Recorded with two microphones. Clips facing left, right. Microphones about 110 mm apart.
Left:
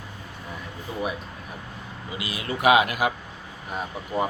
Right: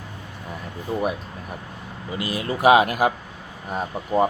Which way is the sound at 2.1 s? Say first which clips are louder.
Right 5 dB; 40° right (ahead or behind).